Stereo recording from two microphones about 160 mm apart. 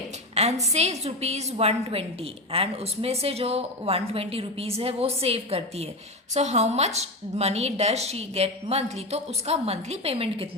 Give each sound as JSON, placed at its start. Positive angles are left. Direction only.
{"t": 0.3, "sound": "a woman's voice", "side_deg": -45}